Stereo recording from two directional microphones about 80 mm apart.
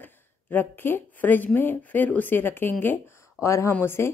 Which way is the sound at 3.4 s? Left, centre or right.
Left.